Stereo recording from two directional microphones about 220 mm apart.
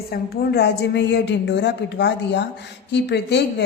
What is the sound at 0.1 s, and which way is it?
A woman's voice, 50° left (ahead or behind).